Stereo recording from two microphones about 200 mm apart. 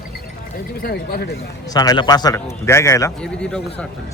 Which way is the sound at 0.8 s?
50° left (ahead or behind).